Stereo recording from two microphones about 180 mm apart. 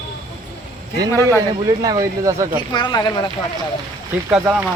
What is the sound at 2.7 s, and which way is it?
Speech, 25° left (ahead or behind).